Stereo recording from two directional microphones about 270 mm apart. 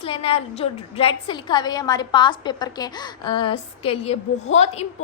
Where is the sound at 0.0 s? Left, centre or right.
Left.